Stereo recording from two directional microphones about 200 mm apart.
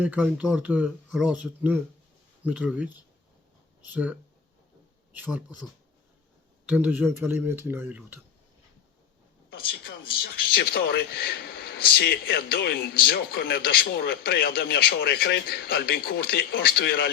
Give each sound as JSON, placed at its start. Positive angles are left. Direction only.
{"t": 0.0, "sound": "speech", "side_deg": -5}
{"t": 6.7, "sound": "speech", "side_deg": -5}
{"t": 9.5, "sound": "a man's voice", "side_deg": 50}